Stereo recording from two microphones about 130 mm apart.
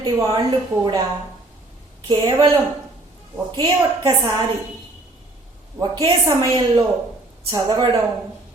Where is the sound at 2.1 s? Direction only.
30° right (ahead or behind).